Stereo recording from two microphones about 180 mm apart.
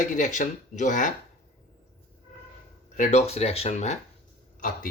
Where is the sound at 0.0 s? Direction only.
45° left (ahead or behind).